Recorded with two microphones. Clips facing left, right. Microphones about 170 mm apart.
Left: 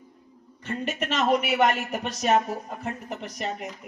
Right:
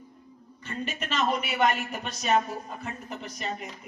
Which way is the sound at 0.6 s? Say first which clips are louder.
Left 5 dB; 75° left (ahead or behind).